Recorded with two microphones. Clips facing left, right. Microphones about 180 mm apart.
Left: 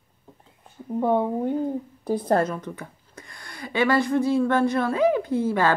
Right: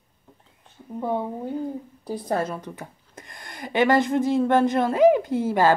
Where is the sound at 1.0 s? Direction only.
55° left (ahead or behind).